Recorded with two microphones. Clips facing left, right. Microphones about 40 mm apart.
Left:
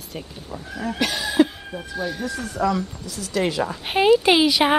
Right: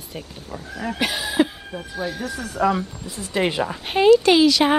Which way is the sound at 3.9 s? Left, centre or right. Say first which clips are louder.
Right 2 dB; centre.